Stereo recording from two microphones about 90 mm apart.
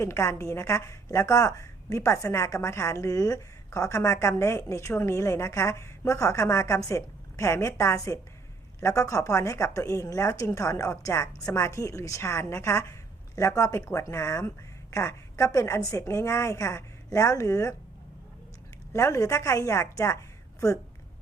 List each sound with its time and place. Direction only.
0.0 s a woman's voice: 35° left (ahead or behind)
18.9 s a woman's voice: 35° left (ahead or behind)